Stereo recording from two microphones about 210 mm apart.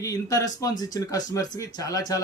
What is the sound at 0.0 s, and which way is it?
Speech, 15° left (ahead or behind).